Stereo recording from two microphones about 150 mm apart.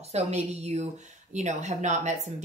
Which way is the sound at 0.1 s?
45° right (ahead or behind).